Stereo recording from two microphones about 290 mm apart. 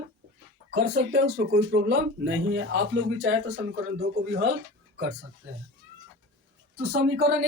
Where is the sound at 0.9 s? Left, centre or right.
Right.